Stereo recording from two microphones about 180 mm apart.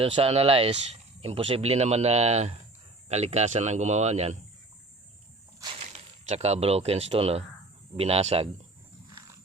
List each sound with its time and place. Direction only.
0.0 s speech: 30° right (ahead or behind)
5.8 s speech: 35° right (ahead or behind)